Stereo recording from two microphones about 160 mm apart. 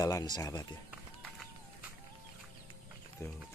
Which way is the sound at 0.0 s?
25° left (ahead or behind).